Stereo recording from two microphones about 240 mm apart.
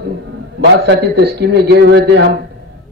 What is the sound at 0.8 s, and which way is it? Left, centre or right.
Speech, right.